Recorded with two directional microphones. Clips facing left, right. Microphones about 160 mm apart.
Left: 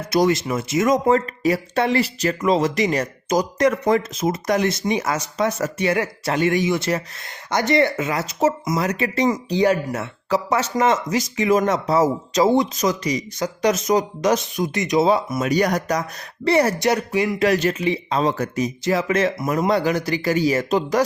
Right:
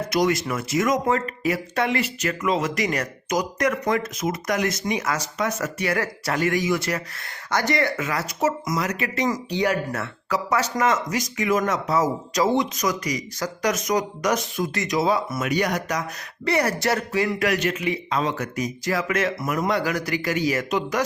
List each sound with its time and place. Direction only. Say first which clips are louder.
0.1 s speech: left 5 dB; 30° left (ahead or behind)
15.5 s speech: left 4 dB; 40° left (ahead or behind)
16.5 s speech: left 4 dB; 25° left (ahead or behind)
17.4 s speech: left 4 dB; 30° left (ahead or behind)